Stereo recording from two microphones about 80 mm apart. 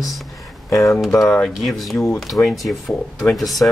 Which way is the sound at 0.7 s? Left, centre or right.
Left.